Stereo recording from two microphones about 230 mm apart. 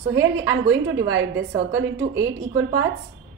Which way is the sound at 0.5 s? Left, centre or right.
Right.